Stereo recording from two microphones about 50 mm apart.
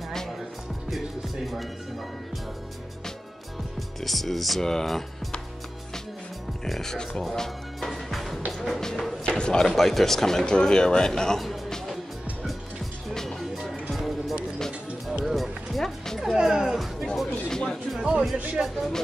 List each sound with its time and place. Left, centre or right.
0.8 s music: centre
4.0 s speech: centre
6.7 s music: centre
8.5 s a man's voice: centre
9.8 s a man's voice: centre
13.1 s music: centre
16.3 s music: centre
17.9 s speech: centre